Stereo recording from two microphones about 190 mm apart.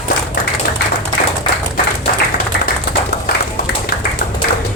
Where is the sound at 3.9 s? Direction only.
55° left (ahead or behind).